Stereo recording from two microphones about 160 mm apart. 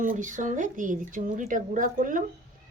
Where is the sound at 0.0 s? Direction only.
55° right (ahead or behind).